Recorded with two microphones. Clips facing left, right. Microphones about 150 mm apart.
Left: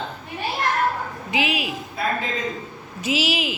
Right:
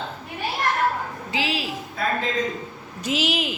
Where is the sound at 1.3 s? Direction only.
15° left (ahead or behind).